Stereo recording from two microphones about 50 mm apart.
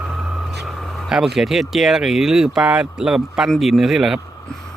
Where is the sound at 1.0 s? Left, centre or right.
Centre.